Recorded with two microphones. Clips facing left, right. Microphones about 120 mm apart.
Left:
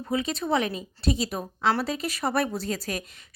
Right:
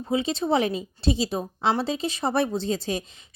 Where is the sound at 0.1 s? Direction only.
25° right (ahead or behind).